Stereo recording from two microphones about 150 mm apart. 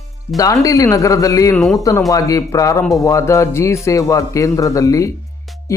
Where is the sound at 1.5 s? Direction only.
Centre (ahead or behind).